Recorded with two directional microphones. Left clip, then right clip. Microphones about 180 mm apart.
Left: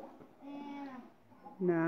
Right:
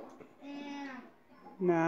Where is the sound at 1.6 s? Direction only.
30° right (ahead or behind).